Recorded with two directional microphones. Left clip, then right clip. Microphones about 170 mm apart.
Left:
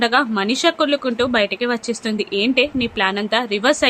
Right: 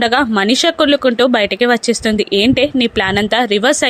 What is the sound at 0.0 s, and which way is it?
Speech, 40° right (ahead or behind).